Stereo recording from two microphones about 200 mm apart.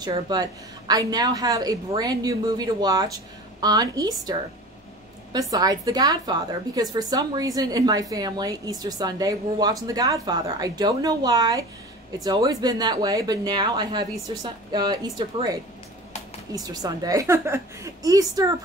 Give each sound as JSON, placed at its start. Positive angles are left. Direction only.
{"t": 0.0, "sound": "a woman's voice", "side_deg": -20}